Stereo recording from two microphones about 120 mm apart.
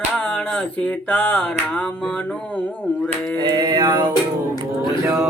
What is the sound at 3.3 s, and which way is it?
Mantra, 35° right (ahead or behind).